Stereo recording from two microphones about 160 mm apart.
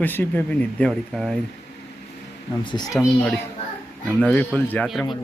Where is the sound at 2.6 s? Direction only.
25° left (ahead or behind).